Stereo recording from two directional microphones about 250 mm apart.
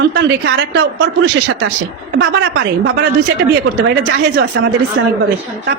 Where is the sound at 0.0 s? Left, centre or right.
Right.